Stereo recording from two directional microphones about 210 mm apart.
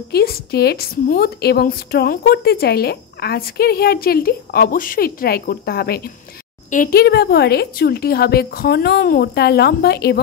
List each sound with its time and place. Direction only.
0.1 s a woman's voice: 50° left (ahead or behind)